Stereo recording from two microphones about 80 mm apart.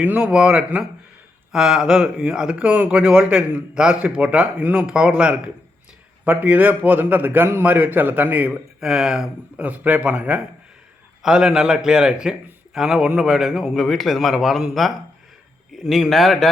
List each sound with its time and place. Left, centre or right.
0.0 s a man's voice: centre
8.8 s a man's voice: centre
9.6 s a man's voice: centre
11.2 s a man's voice: centre